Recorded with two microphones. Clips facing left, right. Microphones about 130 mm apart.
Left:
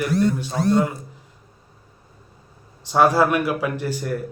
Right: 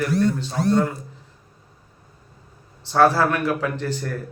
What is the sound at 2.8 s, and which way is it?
A man's voice, 15° left (ahead or behind).